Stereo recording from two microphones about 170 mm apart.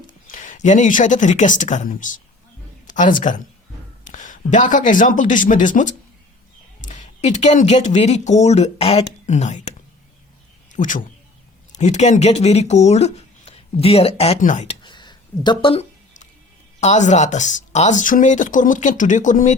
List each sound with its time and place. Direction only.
0.3 s speech: 50° left (ahead or behind)
14.8 s a sound: 25° left (ahead or behind)
16.8 s speech: 45° left (ahead or behind)